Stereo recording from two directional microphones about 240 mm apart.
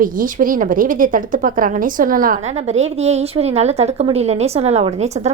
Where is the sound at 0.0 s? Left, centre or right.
Right.